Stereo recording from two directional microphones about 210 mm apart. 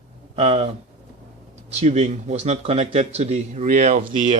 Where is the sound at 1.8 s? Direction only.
30° right (ahead or behind).